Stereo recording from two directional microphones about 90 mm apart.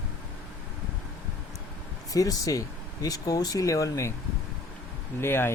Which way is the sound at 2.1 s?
40° left (ahead or behind).